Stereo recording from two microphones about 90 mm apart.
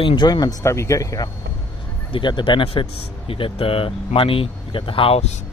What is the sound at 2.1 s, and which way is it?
Speech, 60° left (ahead or behind).